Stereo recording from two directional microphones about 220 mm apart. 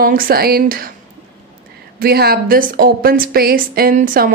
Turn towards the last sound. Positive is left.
turn(degrees=-40)  # may be behind; listen again after turning